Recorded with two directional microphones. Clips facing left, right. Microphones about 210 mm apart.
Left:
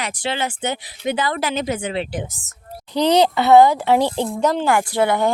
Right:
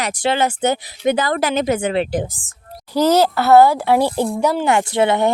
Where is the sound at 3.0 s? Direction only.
5° right (ahead or behind).